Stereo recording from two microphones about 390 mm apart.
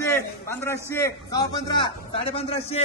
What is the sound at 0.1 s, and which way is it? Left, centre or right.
A man's voice, centre.